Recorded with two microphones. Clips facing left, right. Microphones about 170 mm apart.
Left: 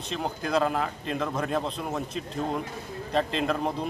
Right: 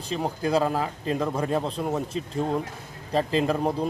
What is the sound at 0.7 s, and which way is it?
Speech, 35° right (ahead or behind).